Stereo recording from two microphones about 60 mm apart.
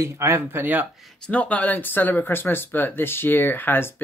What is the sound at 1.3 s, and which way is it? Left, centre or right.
Speech, left.